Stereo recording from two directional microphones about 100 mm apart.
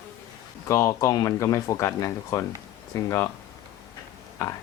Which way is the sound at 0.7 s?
30° left (ahead or behind).